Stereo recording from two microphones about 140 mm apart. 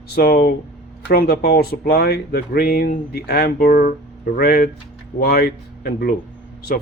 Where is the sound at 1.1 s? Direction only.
90° left.